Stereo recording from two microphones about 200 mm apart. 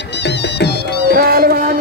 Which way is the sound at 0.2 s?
60° left (ahead or behind).